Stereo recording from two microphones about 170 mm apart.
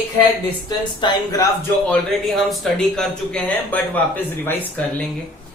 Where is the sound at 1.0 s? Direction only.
20° left (ahead or behind).